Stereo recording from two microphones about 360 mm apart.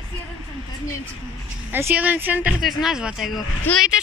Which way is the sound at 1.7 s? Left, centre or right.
Centre.